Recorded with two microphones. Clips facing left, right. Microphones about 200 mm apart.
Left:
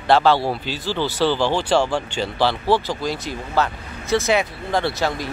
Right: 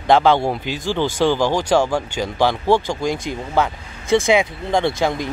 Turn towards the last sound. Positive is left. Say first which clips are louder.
# right 3 dB
turn(degrees=-20)  # may be behind; listen again after turning